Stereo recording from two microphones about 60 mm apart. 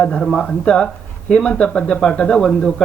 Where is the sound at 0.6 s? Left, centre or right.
Centre.